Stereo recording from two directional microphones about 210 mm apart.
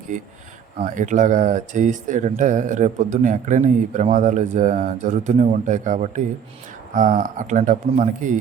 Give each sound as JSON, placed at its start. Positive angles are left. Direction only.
{"t": 0.8, "sound": "speech", "side_deg": -35}